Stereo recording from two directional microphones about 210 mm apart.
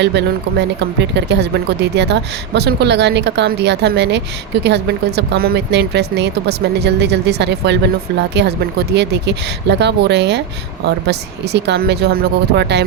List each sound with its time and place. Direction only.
0.0 s speech: 55° right (ahead or behind)